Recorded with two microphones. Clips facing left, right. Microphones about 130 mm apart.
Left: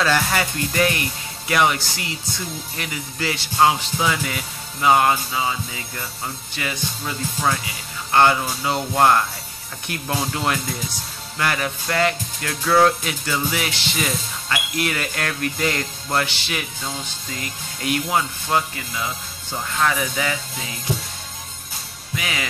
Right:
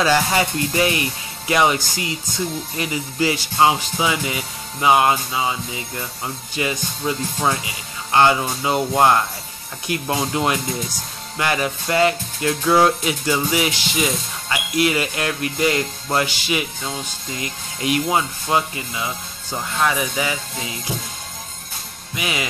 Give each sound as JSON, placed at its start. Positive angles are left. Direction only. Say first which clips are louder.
{"t": 0.0, "sound": "speech", "louder": "right 3 dB", "side_deg": -15}
{"t": 22.1, "sound": "speech", "louder": "right 2 dB", "side_deg": -15}